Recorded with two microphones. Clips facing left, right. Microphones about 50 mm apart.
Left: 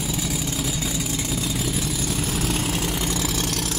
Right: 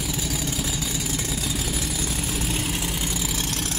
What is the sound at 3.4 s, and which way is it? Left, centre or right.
Vehicle, right.